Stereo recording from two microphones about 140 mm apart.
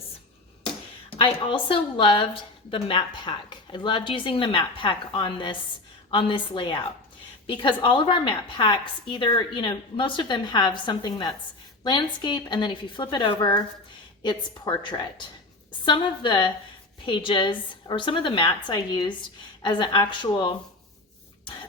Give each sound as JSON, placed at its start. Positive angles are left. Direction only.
{"t": 1.2, "sound": "a woman's voice", "side_deg": 40}